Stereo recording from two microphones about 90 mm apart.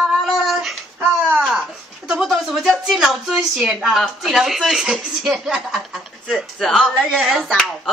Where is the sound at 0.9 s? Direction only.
25° right (ahead or behind).